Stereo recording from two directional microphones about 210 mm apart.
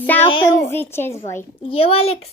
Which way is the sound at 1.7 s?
25° left (ahead or behind).